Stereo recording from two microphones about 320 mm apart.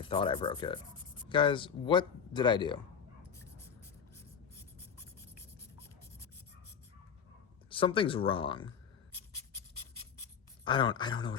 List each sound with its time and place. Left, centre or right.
0.0 s speech: centre
7.7 s speech: centre
10.6 s speech: centre